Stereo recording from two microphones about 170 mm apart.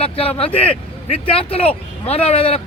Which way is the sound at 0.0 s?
35° left (ahead or behind).